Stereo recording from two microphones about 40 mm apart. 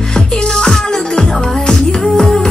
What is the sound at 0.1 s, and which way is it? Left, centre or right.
Music, centre.